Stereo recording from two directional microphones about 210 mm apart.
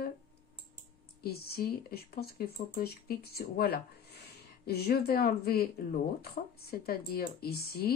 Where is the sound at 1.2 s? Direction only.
50° left (ahead or behind).